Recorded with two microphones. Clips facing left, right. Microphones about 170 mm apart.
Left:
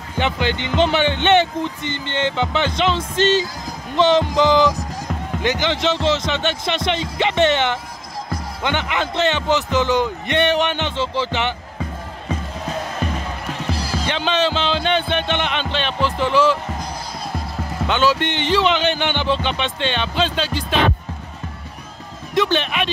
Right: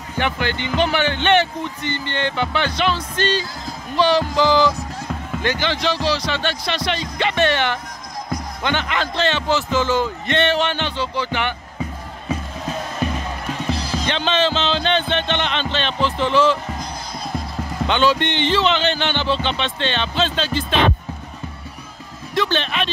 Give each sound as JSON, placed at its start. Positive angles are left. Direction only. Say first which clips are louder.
{"t": 0.2, "sound": "a man's voice", "louder": "left 1 dB", "side_deg": 20}
{"t": 13.7, "sound": "a man's voice", "louder": "even", "side_deg": 10}
{"t": 17.8, "sound": "a man's voice", "louder": "even", "side_deg": 5}
{"t": 22.3, "sound": "a man's voice", "louder": "left 2 dB", "side_deg": 15}